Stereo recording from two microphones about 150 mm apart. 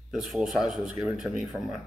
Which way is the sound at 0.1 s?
Centre (ahead or behind).